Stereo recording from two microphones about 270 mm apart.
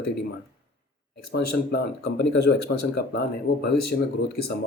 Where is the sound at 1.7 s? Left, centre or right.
Left.